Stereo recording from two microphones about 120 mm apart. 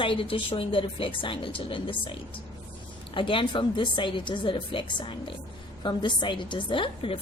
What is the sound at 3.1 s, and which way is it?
A woman's voice, 45° left (ahead or behind).